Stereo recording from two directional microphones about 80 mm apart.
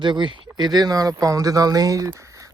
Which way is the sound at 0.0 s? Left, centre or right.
Right.